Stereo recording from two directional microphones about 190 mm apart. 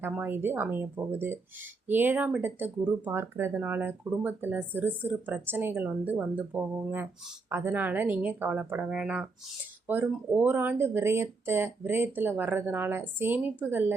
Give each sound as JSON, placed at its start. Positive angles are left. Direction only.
{"t": 0.0, "sound": "speech", "side_deg": -10}